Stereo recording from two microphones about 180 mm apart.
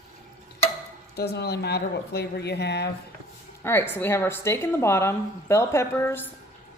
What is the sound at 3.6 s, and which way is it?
Speech, 15° left (ahead or behind).